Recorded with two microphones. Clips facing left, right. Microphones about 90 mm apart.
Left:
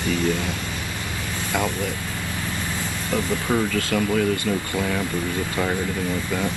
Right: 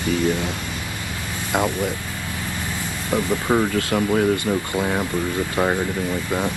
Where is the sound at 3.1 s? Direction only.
25° right (ahead or behind).